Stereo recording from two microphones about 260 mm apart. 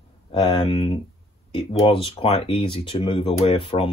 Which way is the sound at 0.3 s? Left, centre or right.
Centre.